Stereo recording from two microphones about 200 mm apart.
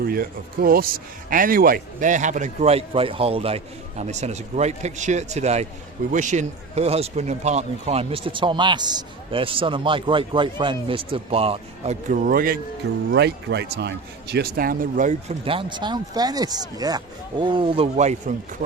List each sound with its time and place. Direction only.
0.0 s a man's voice: 50° right (ahead or behind)
13.1 s a man's voice: 60° right (ahead or behind); by 15.4 s 40° right (ahead or behind)
15.4 s a man's voice: 25° right (ahead or behind)